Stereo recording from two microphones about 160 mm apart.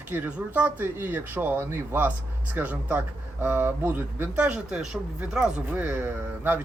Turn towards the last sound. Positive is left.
turn(degrees=-10)  # may be behind; listen again after turning